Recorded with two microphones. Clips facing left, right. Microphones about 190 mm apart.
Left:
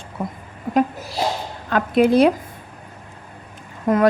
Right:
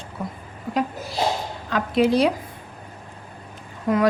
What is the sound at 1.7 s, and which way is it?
Speech, 55° left (ahead or behind).